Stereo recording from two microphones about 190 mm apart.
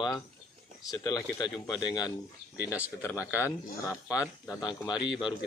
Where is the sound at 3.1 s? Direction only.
10° right (ahead or behind).